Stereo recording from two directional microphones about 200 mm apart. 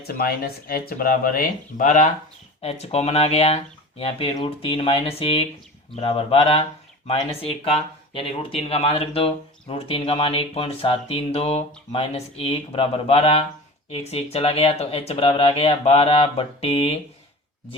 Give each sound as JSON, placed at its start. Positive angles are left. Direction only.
{"t": 0.0, "sound": "speech", "side_deg": 50}